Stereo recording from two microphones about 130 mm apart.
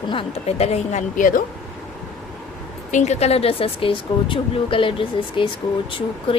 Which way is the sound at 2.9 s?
60° left (ahead or behind).